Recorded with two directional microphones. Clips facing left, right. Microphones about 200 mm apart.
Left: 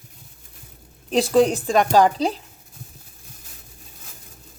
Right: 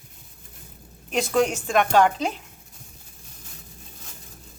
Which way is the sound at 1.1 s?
35° left (ahead or behind).